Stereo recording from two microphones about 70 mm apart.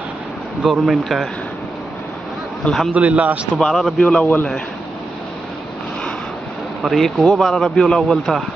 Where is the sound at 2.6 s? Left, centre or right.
Centre.